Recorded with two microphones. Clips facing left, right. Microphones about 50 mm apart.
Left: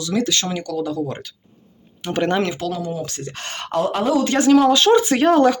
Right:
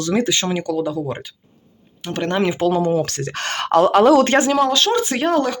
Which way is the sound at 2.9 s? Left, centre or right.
Right.